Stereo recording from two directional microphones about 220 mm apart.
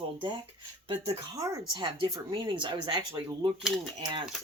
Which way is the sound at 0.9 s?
25° right (ahead or behind).